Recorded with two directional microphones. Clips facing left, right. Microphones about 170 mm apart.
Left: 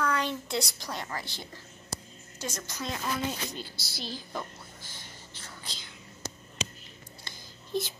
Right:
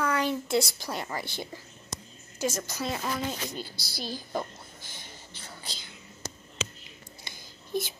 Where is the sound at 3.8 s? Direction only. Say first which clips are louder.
Right 3 dB; 40° right (ahead or behind).